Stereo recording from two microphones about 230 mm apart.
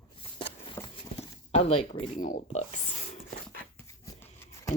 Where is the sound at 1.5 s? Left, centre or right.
Left.